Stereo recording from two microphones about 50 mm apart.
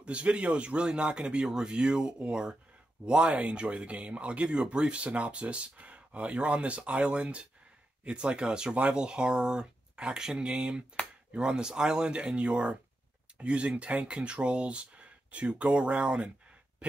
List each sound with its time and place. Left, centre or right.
0.0 s speech: right